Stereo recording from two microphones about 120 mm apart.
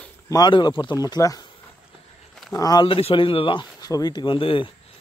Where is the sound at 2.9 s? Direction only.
50° left (ahead or behind).